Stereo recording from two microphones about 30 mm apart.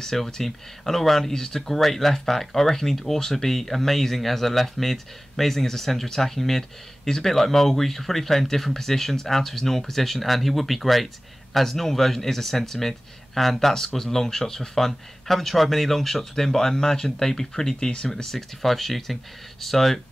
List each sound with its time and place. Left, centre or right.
0.0 s speech: centre
1.7 s speech: centre
15.2 s speech: centre
16.7 s speech: left; by 20.0 s centre